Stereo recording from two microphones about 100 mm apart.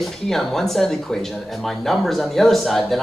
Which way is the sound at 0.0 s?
5° left (ahead or behind).